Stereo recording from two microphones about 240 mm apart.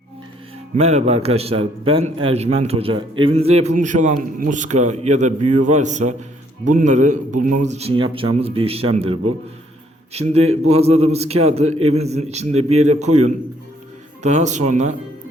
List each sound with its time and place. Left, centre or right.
0.8 s a man's voice: right